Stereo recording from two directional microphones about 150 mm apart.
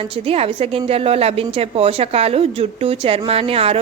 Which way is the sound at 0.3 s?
40° right (ahead or behind).